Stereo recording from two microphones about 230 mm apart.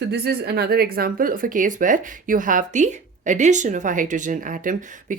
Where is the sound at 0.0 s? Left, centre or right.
Right.